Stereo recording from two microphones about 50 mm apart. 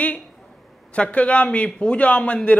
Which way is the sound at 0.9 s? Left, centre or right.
Left.